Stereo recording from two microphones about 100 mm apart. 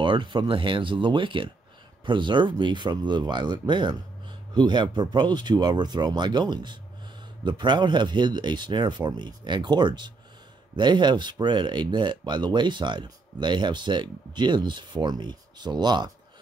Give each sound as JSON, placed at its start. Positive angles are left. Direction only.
{"t": 0.0, "sound": "speech", "side_deg": -55}